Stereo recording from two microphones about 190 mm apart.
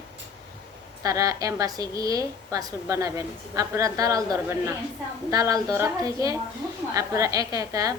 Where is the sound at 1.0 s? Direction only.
15° right (ahead or behind).